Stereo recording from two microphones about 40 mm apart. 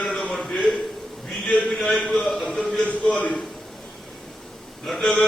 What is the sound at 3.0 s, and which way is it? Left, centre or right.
Speech, left.